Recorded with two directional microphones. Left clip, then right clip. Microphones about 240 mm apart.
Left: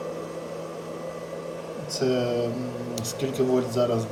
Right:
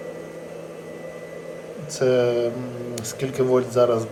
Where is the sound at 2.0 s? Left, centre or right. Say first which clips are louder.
Right 6 dB; centre.